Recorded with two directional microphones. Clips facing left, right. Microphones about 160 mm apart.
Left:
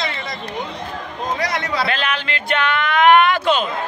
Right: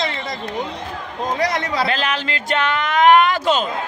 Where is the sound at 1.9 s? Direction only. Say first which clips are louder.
Right 1 dB; 40° right (ahead or behind).